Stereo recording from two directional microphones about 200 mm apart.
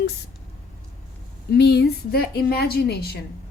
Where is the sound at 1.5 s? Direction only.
55° left (ahead or behind).